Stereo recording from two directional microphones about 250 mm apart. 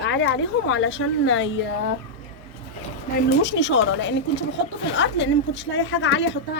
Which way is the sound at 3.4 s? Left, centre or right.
Left.